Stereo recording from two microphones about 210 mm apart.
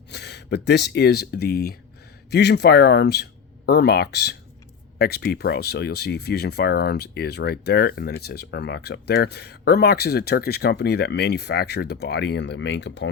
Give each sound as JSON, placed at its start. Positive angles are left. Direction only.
{"t": 0.1, "sound": "speech", "side_deg": 50}